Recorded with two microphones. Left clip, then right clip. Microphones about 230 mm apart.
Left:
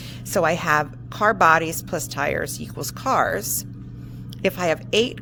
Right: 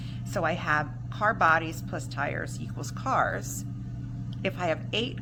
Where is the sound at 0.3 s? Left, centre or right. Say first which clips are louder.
Left 8 dB; left.